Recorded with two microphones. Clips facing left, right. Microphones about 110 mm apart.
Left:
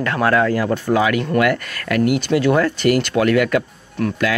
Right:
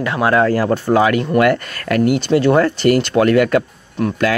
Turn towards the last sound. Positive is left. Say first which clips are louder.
# right 2 dB
turn(degrees=-20)  # may be behind; listen again after turning